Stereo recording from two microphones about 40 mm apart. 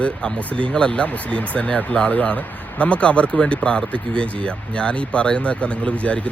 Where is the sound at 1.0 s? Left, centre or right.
Left.